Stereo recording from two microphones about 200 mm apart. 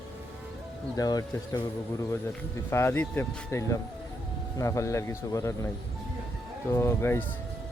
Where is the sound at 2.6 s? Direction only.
10° left (ahead or behind).